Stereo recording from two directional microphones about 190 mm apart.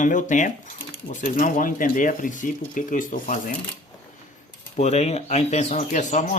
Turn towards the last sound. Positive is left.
turn(degrees=40)  # may be behind; listen again after turning